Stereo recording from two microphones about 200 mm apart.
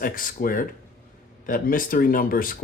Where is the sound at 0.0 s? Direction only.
45° left (ahead or behind).